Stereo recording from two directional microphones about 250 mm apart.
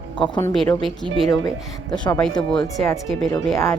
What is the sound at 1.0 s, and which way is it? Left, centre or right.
Speech, right.